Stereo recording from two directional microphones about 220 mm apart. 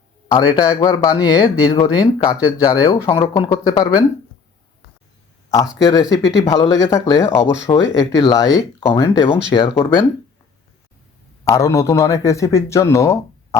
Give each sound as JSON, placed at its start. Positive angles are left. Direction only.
{"t": 0.3, "sound": "speech", "side_deg": 15}
{"t": 5.8, "sound": "speech", "side_deg": 15}
{"t": 11.5, "sound": "speech", "side_deg": 15}